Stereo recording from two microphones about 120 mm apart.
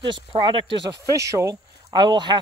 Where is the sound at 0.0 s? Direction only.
40° right (ahead or behind).